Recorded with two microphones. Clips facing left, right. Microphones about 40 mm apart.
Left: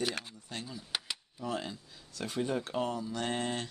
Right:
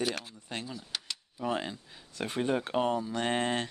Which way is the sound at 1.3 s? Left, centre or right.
Right.